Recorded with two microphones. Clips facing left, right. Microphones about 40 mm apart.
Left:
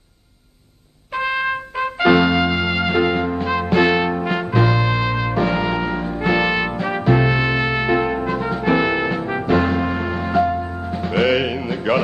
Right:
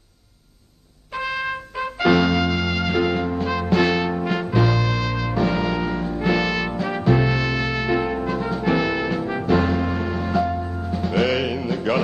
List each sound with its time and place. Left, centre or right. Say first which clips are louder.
1.1 s brass instrument: left 5 dB; centre
2.2 s music: left 3 dB; centre
4.7 s music: left 4 dB; left
5.7 s brass instrument: left 2 dB; centre
7.3 s music: left 4 dB; left
11.6 s a sound: left 2 dB; centre